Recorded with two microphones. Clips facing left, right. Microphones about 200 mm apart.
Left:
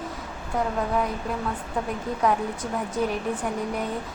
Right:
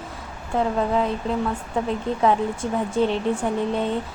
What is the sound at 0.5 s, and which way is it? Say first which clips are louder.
Speech: right 4 dB; 25° right (ahead or behind).